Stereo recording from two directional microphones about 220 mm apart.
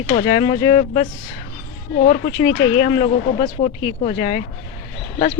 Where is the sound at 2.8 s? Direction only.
25° left (ahead or behind).